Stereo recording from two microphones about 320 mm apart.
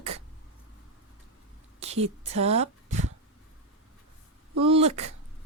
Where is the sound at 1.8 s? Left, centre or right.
Centre.